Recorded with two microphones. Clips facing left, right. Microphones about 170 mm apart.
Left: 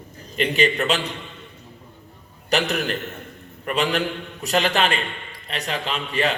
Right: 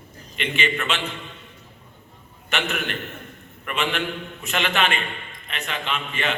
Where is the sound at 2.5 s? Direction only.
35° left (ahead or behind).